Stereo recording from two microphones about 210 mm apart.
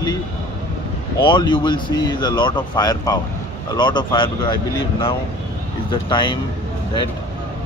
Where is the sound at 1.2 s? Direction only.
20° left (ahead or behind).